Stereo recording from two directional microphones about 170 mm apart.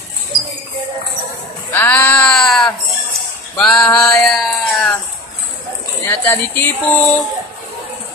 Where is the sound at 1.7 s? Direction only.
10° left (ahead or behind).